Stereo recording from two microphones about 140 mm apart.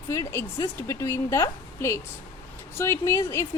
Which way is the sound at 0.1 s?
20° left (ahead or behind).